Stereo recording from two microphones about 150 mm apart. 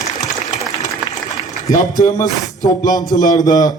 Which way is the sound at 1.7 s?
60° left (ahead or behind).